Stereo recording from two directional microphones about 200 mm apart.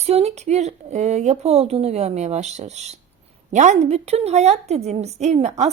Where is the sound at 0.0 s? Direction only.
30° right (ahead or behind).